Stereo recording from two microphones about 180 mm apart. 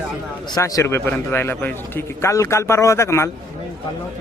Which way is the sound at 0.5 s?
20° left (ahead or behind).